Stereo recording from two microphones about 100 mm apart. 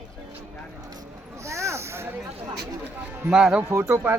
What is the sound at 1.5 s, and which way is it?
Snake, 30° right (ahead or behind).